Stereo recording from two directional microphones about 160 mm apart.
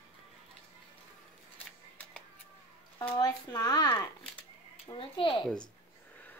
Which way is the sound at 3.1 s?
25° left (ahead or behind).